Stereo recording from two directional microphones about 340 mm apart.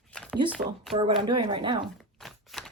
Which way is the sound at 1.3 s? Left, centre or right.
Centre.